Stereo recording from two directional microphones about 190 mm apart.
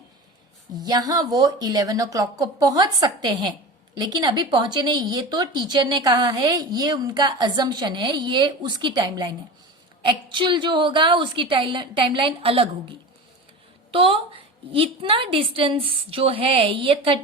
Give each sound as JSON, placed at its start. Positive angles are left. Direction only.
{"t": 0.8, "sound": "speech", "side_deg": -20}
{"t": 13.9, "sound": "speech", "side_deg": -30}